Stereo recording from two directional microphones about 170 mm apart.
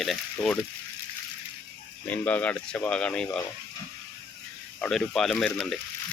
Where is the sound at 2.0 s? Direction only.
10° left (ahead or behind).